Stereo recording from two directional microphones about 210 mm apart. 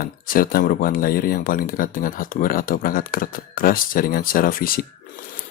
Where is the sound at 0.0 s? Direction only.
45° left (ahead or behind).